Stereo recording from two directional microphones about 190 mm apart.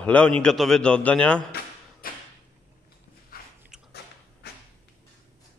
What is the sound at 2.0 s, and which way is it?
Sliding door, 50° left (ahead or behind).